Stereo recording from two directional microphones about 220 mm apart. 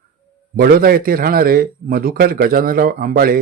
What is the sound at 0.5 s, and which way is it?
Speech, 40° right (ahead or behind).